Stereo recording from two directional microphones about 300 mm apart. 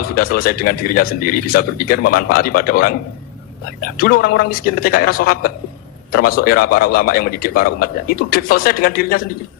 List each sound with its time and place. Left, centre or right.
0.0 s a man's voice: left